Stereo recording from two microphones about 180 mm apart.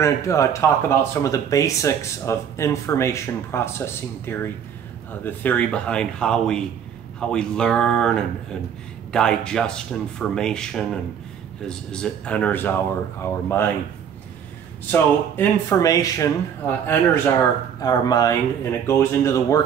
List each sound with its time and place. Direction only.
0.0 s speech: 15° left (ahead or behind)
14.9 s speech: 15° left (ahead or behind)